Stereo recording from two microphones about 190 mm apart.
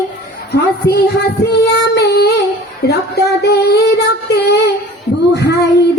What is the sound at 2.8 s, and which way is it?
Female singing, 60° left (ahead or behind).